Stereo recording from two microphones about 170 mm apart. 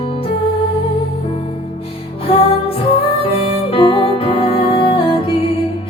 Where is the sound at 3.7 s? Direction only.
30° left (ahead or behind).